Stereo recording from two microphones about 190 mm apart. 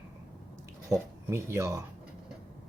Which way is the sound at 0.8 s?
15° right (ahead or behind).